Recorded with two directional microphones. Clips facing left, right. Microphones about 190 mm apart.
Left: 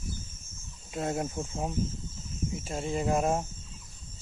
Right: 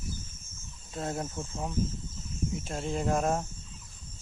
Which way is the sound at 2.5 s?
5° left (ahead or behind).